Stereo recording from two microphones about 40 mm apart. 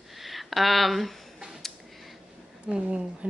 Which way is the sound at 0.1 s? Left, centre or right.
Centre.